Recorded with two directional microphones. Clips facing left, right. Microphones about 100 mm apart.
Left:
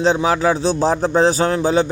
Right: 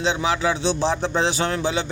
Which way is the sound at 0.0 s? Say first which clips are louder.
Left 6 dB; 40° left (ahead or behind).